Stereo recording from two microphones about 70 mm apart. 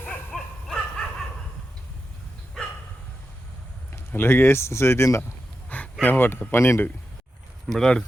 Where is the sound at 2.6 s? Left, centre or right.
Centre.